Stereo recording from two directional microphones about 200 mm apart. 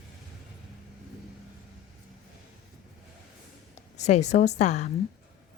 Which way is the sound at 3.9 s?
35° left (ahead or behind).